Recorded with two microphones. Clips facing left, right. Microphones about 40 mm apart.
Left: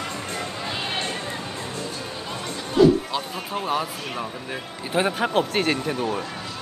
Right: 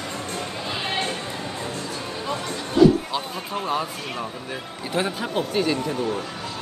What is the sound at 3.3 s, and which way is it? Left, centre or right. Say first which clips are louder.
Speech: left 1 dB; centre.